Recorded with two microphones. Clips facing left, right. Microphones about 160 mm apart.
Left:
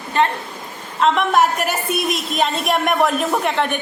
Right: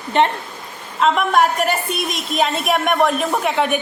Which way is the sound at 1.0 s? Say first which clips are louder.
Even; centre (ahead or behind).